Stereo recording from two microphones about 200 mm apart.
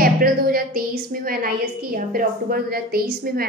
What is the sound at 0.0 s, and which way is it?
A woman's voice, 45° right (ahead or behind).